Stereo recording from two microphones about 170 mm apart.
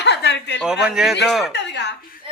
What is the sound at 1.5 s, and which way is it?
Speech, 85° left.